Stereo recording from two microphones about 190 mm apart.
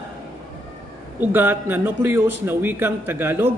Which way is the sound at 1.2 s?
10° right (ahead or behind).